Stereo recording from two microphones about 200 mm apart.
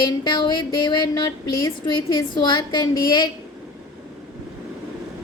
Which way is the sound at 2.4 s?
20° left (ahead or behind).